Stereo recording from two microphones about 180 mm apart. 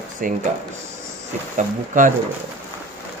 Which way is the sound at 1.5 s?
45° right (ahead or behind).